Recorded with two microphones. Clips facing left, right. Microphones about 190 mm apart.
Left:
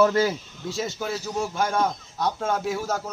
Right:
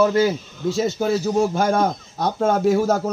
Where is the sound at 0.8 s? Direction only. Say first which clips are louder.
Right 9 dB; 40° right (ahead or behind).